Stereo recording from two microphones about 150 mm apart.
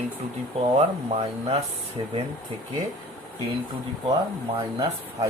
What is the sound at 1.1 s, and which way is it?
Speech, 35° right (ahead or behind).